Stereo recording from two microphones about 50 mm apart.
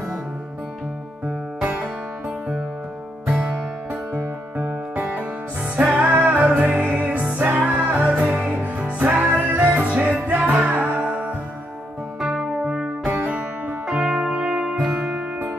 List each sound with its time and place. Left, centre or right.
1.6 s music: right
5.2 s music: right
9.5 s music: right
9.8 s music: right
12.2 s music: centre
13.0 s music: right
13.8 s music: centre